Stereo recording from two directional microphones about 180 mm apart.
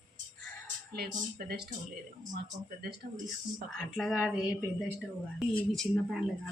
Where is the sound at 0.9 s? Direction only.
60° right (ahead or behind).